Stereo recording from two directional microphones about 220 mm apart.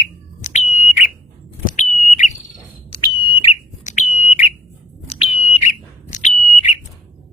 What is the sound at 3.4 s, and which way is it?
Bird, 35° left (ahead or behind).